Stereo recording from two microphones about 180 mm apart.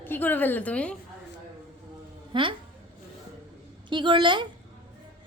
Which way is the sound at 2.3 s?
30° right (ahead or behind).